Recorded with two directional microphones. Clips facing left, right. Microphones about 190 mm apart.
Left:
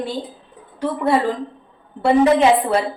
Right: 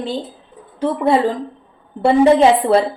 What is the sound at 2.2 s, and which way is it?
Speech, 30° right (ahead or behind).